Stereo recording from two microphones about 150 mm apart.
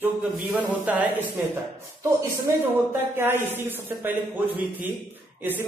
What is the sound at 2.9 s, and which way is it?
Speech, 15° right (ahead or behind).